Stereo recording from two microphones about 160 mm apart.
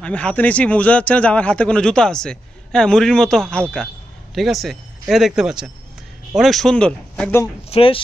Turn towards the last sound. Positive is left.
turn(degrees=35)  # may be behind; listen again after turning